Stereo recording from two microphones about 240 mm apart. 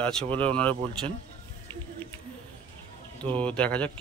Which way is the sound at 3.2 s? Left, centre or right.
Centre.